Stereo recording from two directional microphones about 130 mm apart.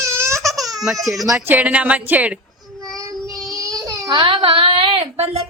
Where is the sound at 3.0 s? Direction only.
25° right (ahead or behind).